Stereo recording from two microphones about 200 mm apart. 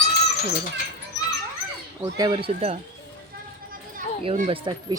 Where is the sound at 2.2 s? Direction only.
25° right (ahead or behind).